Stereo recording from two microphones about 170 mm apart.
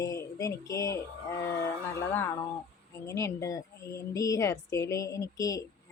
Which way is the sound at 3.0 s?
15° left (ahead or behind).